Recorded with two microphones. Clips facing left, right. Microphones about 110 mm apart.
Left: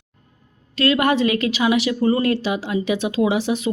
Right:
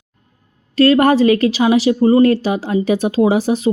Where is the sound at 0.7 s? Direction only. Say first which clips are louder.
Right 7 dB; 40° right (ahead or behind).